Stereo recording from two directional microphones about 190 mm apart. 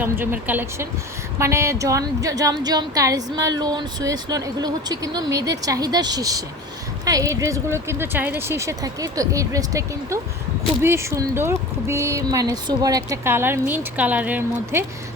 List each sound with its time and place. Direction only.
0.0 s a woman's voice: 10° right (ahead or behind)